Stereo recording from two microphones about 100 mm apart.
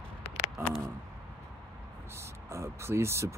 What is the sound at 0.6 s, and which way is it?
Speech, 25° right (ahead or behind).